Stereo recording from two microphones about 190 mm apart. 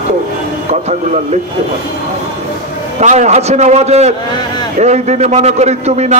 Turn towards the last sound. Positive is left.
turn(degrees=-35)  # may be behind; listen again after turning